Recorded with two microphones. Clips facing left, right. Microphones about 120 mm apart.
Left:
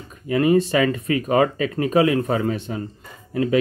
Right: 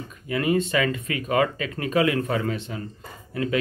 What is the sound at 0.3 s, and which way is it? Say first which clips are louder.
Speech: left 5 dB; 35° left (ahead or behind).